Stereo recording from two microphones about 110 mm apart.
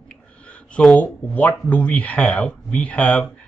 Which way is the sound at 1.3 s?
15° left (ahead or behind).